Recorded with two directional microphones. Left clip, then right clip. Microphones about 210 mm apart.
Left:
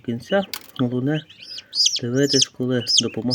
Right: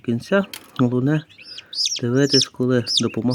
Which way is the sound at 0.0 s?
40° right (ahead or behind).